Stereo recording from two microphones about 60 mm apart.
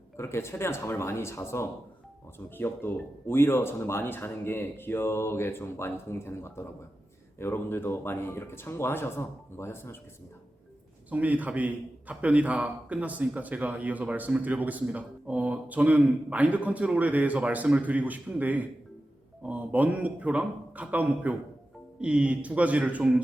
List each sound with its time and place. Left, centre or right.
0.2 s speech: left
2.6 s speech: left
11.1 s a man's voice: right